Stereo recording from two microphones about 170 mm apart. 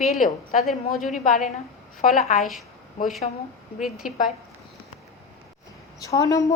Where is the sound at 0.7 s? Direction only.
Centre (ahead or behind).